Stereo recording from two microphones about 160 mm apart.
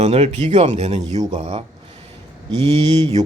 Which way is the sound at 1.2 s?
25° right (ahead or behind).